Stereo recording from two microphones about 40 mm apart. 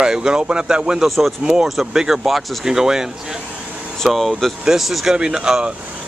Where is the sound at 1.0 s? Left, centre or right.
Centre.